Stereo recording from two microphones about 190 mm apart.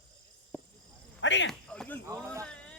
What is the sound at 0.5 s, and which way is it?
Cricket, 10° left (ahead or behind).